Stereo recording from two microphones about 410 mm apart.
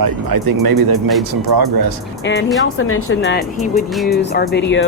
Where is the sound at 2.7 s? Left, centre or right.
Left.